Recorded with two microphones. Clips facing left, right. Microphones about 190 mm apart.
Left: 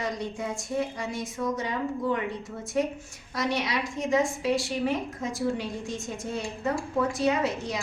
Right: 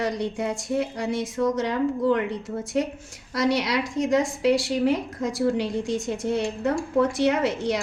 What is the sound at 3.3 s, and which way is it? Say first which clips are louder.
A woman's voice: right 5 dB; 80° right.